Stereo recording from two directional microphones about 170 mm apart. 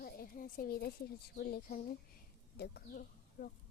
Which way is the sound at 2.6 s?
70° left (ahead or behind).